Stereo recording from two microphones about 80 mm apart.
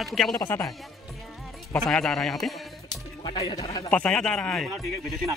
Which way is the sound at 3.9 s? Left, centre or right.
Centre.